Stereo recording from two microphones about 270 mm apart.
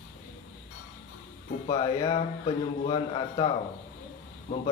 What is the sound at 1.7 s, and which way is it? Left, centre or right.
A man's voice, centre.